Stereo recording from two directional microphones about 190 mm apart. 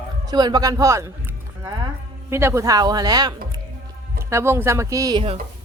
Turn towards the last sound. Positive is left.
turn(degrees=-25)  # may be behind; listen again after turning